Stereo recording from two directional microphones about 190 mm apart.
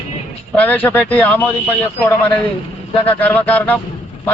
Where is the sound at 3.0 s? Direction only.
10° left (ahead or behind).